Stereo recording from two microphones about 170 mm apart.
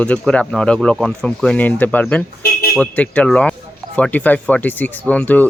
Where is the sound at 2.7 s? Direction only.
10° left (ahead or behind).